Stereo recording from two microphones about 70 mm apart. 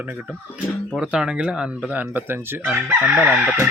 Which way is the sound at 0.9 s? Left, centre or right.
Centre.